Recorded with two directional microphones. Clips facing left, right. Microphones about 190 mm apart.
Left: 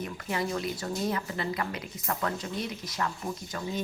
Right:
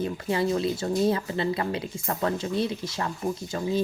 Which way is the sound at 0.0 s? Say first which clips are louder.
Right 6 dB; 30° right (ahead or behind).